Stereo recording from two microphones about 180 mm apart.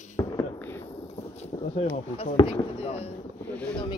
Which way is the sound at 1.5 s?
30° left (ahead or behind).